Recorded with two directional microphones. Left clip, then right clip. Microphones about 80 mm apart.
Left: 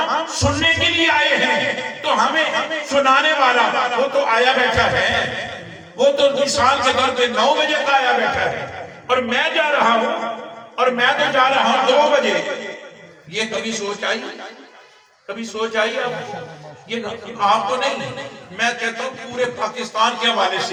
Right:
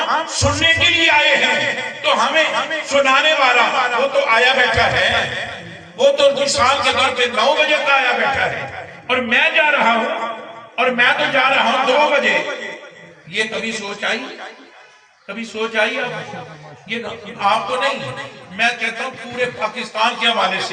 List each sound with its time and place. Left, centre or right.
0.0 s a man's voice: centre; by 14.1 s left
15.4 s a man's voice: left
17.4 s a man's voice: left